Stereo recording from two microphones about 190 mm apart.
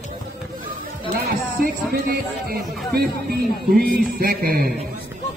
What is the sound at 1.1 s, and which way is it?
Speech, 50° right (ahead or behind).